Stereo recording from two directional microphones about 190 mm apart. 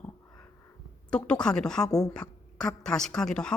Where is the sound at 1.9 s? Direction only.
20° left (ahead or behind).